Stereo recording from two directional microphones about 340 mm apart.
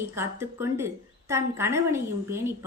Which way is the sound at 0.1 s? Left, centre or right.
Centre.